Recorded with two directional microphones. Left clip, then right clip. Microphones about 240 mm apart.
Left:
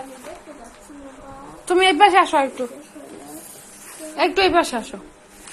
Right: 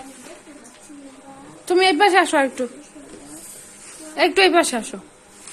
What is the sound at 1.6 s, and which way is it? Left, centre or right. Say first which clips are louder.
A woman's voice: left 1 dB; centre.